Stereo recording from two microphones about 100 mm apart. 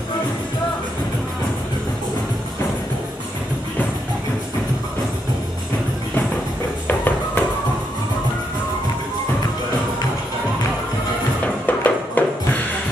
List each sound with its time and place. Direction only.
6.9 s music: 20° left (ahead or behind)
11.4 s music: 15° left (ahead or behind)